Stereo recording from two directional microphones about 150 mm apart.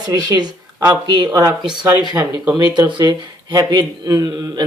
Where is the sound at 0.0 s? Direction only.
25° right (ahead or behind).